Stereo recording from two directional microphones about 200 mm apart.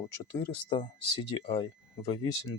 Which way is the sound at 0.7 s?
20° left (ahead or behind).